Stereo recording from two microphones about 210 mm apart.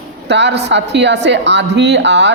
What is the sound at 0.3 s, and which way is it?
A woman's voice, 55° right (ahead or behind).